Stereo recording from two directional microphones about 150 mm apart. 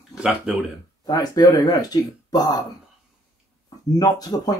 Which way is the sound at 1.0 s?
25° left (ahead or behind).